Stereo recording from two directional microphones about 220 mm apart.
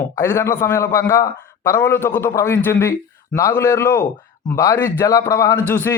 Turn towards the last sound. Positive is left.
turn(degrees=10)  # may be behind; listen again after turning